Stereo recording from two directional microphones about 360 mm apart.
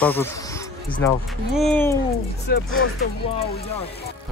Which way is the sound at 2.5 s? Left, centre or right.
Left.